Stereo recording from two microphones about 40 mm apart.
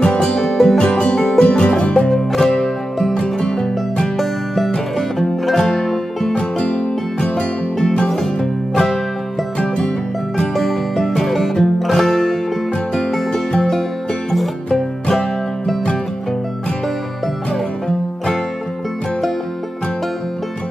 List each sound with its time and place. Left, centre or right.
0.0 s music: centre
0.7 s music: left
6.3 s music: left
10.3 s music: centre
17.8 s music: centre